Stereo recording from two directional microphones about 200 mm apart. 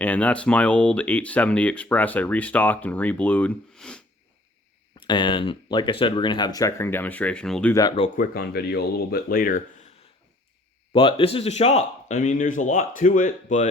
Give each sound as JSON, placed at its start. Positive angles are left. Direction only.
{"t": 0.0, "sound": "speech", "side_deg": 10}
{"t": 4.9, "sound": "speech", "side_deg": 25}
{"t": 7.7, "sound": "speech", "side_deg": 20}
{"t": 8.1, "sound": "speech", "side_deg": 45}
{"t": 10.9, "sound": "speech", "side_deg": 25}